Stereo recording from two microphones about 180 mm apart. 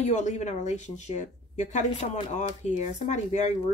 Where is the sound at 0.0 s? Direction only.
40° left (ahead or behind).